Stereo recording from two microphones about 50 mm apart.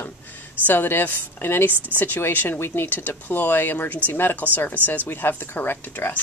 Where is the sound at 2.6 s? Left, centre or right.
Left.